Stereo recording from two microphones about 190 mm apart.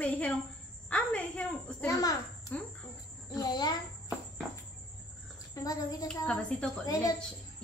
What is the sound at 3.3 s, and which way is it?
Speech, 20° left (ahead or behind).